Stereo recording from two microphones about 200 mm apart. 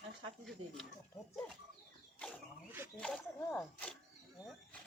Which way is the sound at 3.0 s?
5° left (ahead or behind).